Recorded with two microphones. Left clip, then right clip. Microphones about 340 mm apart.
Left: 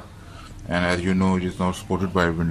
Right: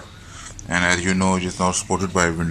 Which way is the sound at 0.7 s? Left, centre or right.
Centre.